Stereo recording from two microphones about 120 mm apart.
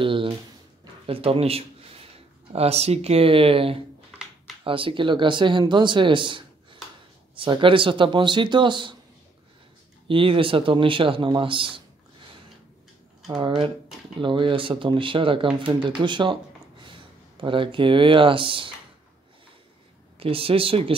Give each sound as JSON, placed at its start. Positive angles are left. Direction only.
{"t": 0.0, "sound": "a sound", "side_deg": -45}
{"t": 1.0, "sound": "speech", "side_deg": -50}
{"t": 10.0, "sound": "speech", "side_deg": -45}
{"t": 14.2, "sound": "speech", "side_deg": -45}
{"t": 20.2, "sound": "speech", "side_deg": -50}